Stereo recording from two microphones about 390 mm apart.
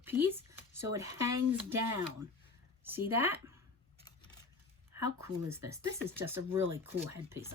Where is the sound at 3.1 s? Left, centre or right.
Right.